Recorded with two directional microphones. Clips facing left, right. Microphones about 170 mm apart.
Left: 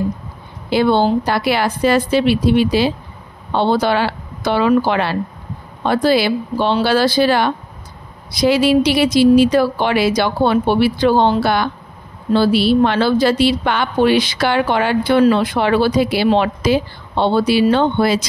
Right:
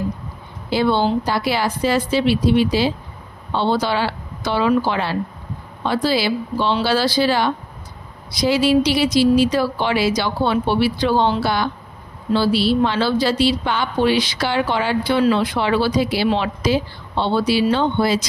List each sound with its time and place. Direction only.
0.7 s a woman's voice: 55° left (ahead or behind)